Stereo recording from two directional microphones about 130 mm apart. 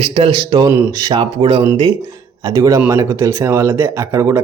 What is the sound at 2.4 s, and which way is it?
A man's voice, 25° right (ahead or behind).